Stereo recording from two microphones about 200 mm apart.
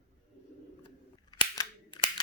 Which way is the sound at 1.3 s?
20° left (ahead or behind).